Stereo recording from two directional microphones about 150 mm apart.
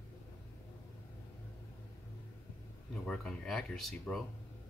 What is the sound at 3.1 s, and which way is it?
Speech, 5° left (ahead or behind).